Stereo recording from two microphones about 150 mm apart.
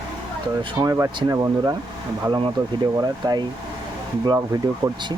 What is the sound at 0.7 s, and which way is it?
Speech, 20° right (ahead or behind).